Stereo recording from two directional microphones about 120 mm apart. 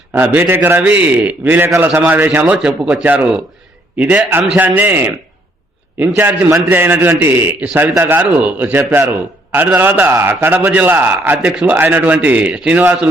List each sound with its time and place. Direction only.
0.1 s a man's voice: 15° right (ahead or behind)
6.1 s a man's voice: 15° right (ahead or behind)